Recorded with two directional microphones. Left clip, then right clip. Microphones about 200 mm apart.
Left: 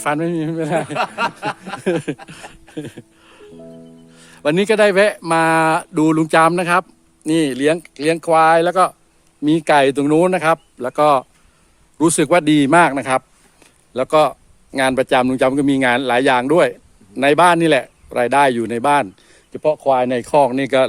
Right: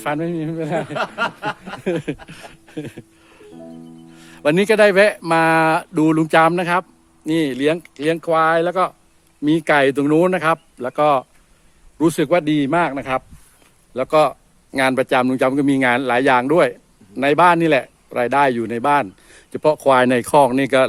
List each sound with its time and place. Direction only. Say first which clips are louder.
0.0 s a man's voice: left 3 dB; 15° left (ahead or behind)
0.9 s a sound: left 2 dB; 45° left (ahead or behind)
1.8 s speech: left 3 dB; 15° left (ahead or behind)
2.2 s a sound: left 2 dB; 5° left (ahead or behind)
4.2 s a man's voice: even; centre (ahead or behind)
19.4 s speech: right 1 dB; 15° right (ahead or behind); by 20.8 s centre (ahead or behind)